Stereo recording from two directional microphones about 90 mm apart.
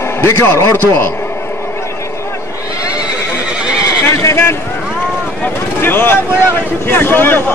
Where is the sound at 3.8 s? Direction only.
35° left (ahead or behind).